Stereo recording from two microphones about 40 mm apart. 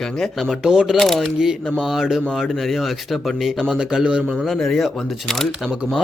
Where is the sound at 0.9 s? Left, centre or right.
Centre.